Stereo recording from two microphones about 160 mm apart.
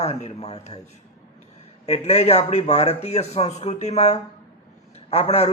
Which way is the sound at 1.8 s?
40° left (ahead or behind).